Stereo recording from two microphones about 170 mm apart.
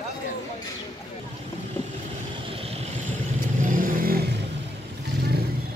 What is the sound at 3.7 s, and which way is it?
Vehicle, 55° right (ahead or behind).